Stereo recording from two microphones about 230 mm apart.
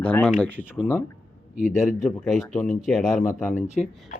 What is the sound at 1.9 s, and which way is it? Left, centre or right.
Speech, centre.